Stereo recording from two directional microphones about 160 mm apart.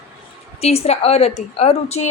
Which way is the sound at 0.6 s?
40° left (ahead or behind).